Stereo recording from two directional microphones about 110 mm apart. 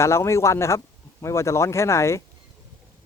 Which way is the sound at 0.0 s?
25° left (ahead or behind).